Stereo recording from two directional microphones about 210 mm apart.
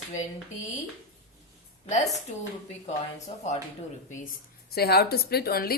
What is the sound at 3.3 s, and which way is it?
Speech, 25° left (ahead or behind).